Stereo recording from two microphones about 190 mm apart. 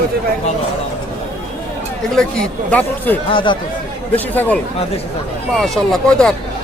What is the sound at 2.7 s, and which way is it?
Speech, 10° left (ahead or behind).